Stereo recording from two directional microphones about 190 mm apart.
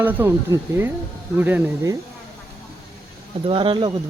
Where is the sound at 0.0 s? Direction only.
10° right (ahead or behind).